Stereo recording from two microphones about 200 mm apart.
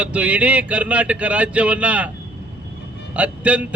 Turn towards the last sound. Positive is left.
turn(degrees=-5)  # may be behind; listen again after turning